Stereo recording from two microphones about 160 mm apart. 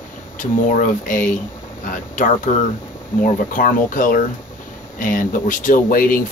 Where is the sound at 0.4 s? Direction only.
55° left (ahead or behind).